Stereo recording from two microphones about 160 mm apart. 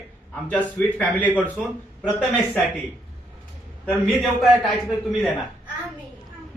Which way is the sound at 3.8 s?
5° left (ahead or behind).